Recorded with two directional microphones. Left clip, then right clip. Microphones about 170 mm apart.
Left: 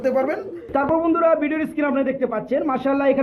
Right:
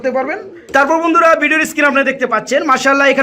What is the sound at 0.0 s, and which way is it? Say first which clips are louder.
A man's voice: right 4 dB; 10° right (ahead or behind).